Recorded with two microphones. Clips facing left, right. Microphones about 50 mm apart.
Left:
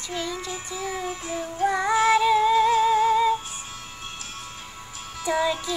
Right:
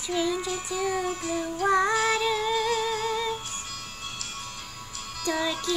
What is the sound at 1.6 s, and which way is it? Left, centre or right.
Music, centre.